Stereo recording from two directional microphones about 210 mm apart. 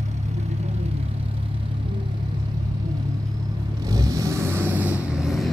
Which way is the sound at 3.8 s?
15° right (ahead or behind).